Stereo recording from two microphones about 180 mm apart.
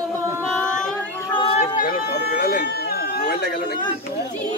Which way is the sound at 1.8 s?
55° left (ahead or behind).